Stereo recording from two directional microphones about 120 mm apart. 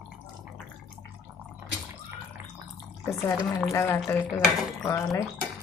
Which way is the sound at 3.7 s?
20° left (ahead or behind).